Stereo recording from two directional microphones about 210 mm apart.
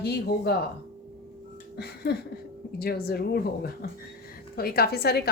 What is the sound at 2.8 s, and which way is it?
Speech, 45° left (ahead or behind).